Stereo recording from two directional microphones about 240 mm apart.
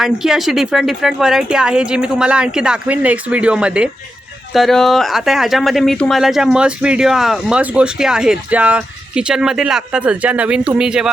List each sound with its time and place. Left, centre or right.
0.0 s speech: centre